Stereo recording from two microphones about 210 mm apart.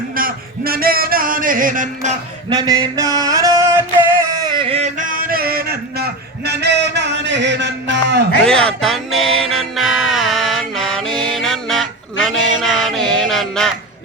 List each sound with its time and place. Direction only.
0.2 s music: 45° right (ahead or behind)
2.6 s a sound: 15° right (ahead or behind); by 8.2 s 55° right (ahead or behind)
8.4 s music: 5° left (ahead or behind)